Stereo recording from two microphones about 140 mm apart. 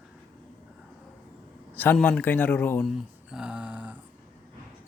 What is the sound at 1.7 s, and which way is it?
Speech, 10° left (ahead or behind).